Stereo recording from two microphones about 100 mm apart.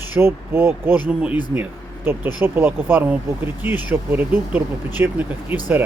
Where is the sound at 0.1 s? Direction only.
20° right (ahead or behind).